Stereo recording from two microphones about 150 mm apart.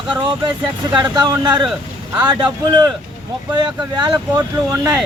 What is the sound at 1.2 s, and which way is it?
A man's voice, 25° right (ahead or behind).